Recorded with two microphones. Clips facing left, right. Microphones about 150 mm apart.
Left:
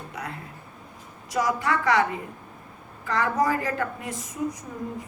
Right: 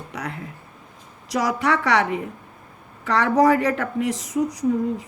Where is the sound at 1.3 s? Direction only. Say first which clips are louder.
Right 3 dB; 90° right.